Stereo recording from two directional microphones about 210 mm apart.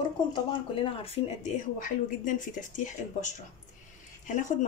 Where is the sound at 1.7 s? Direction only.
40° left (ahead or behind).